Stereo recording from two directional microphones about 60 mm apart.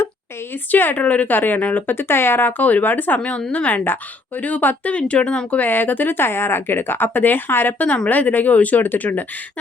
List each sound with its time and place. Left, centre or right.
0.7 s speech: left
0.9 s speech: left
3.2 s a woman's voice: centre